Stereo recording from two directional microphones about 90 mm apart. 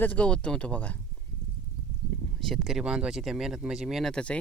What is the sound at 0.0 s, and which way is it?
Speech, 15° left (ahead or behind).